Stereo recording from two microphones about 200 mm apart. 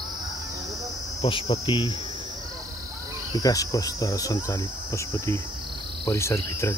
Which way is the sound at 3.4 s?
15° left (ahead or behind).